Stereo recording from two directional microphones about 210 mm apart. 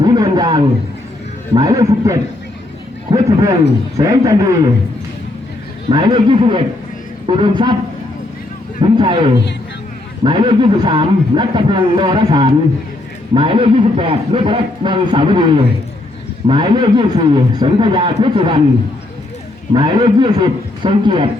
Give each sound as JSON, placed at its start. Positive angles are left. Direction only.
{"t": 0.0, "sound": "a sound", "side_deg": -20}
{"t": 1.5, "sound": "a man's voice", "side_deg": -15}
{"t": 5.9, "sound": "a man's voice", "side_deg": -20}
{"t": 8.8, "sound": "a man's voice", "side_deg": -25}
{"t": 19.7, "sound": "a man's voice", "side_deg": -20}